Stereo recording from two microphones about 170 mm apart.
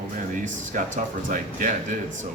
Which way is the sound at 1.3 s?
50° right (ahead or behind).